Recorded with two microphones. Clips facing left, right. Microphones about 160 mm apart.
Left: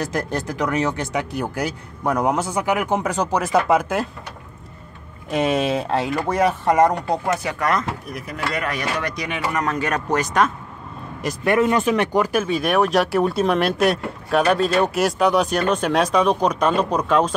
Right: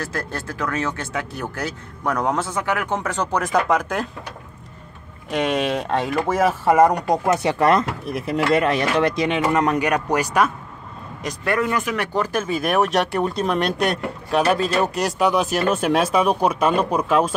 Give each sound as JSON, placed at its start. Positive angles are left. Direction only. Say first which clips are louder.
{"t": 0.0, "sound": "speech", "louder": "left 4 dB", "side_deg": 15}
{"t": 5.3, "sound": "speech", "louder": "left 1 dB", "side_deg": 5}
{"t": 11.4, "sound": "speech", "louder": "left 4 dB", "side_deg": 25}
{"t": 12.1, "sound": "speech", "louder": "left 3 dB", "side_deg": 10}
{"t": 12.4, "sound": "speech", "louder": "left 1 dB", "side_deg": 0}